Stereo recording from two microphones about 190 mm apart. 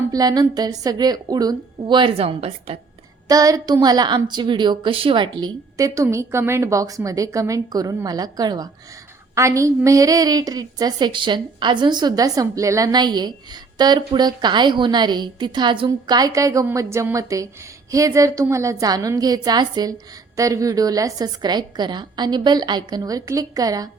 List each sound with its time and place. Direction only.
0.1 s a woman's voice: 20° right (ahead or behind)
3.2 s a woman's voice: 20° right (ahead or behind)